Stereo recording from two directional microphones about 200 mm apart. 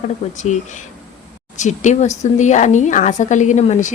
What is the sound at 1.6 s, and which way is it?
Speech, 35° left (ahead or behind).